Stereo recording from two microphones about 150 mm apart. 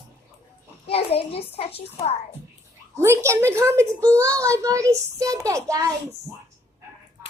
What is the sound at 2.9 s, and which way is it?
A woman's voice, 20° right (ahead or behind).